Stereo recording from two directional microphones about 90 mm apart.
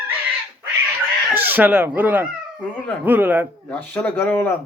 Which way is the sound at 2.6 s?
20° left (ahead or behind).